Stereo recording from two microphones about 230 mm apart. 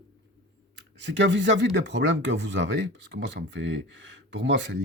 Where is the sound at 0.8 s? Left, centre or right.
Right.